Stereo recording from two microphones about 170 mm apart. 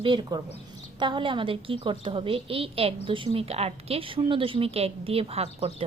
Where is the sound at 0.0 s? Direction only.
30° right (ahead or behind).